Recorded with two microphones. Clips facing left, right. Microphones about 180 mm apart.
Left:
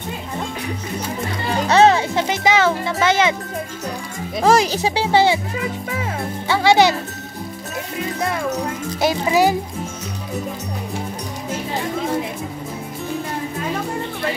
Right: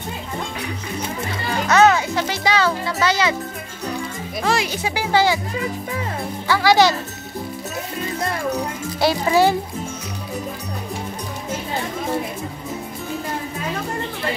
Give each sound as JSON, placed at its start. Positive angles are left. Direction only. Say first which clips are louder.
{"t": 1.7, "sound": "music", "louder": "left 1 dB", "side_deg": 30}
{"t": 2.2, "sound": "a child's voice", "louder": "left 4 dB", "side_deg": 20}
{"t": 4.5, "sound": "a child's voice", "louder": "left 6 dB", "side_deg": 35}
{"t": 6.4, "sound": "a child's voice", "louder": "left 1 dB", "side_deg": 25}
{"t": 9.0, "sound": "a child's voice", "louder": "even", "side_deg": 15}